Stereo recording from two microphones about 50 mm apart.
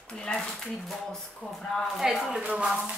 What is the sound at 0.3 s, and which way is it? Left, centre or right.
Speech, centre.